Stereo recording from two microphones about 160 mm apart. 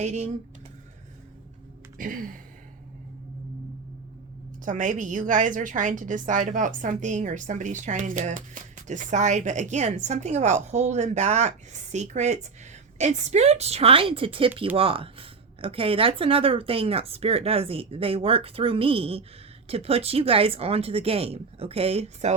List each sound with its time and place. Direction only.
0.0 s a woman's voice: 45° right (ahead or behind)
2.0 s gasp: 60° right (ahead or behind)
4.6 s a woman's voice: 55° right (ahead or behind)